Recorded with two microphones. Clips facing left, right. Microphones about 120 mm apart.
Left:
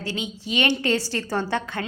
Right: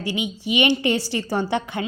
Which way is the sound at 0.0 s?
15° right (ahead or behind).